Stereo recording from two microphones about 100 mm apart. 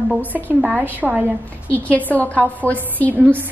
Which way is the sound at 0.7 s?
20° right (ahead or behind).